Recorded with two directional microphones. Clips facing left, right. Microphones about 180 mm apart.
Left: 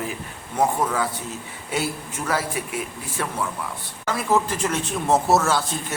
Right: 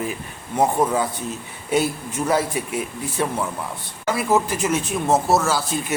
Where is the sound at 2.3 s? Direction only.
20° right (ahead or behind).